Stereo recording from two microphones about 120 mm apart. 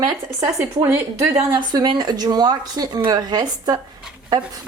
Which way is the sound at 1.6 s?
40° right (ahead or behind).